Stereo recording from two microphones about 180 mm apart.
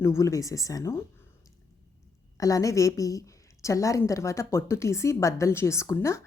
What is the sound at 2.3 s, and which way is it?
A woman's voice, 20° left (ahead or behind).